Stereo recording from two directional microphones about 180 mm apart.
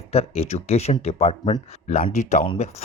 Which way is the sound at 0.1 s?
35° left (ahead or behind).